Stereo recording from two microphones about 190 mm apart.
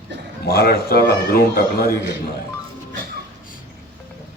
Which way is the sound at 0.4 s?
55° left (ahead or behind).